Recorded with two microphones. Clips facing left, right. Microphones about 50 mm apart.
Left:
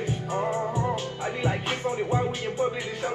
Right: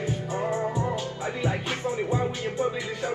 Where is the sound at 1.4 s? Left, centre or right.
Left.